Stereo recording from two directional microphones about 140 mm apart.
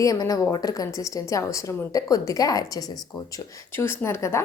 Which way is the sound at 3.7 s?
15° left (ahead or behind).